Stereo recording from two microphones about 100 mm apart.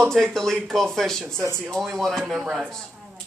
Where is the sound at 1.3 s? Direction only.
25° right (ahead or behind).